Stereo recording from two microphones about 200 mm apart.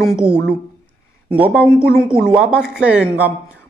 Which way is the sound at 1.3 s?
5° right (ahead or behind).